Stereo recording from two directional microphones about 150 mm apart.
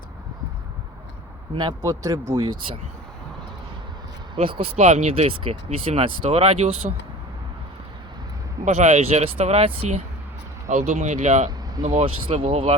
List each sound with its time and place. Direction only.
1.5 s speech: 25° right (ahead or behind)
4.4 s speech: 35° right (ahead or behind)
8.6 s speech: 50° right (ahead or behind)
11.9 s speech: 40° right (ahead or behind)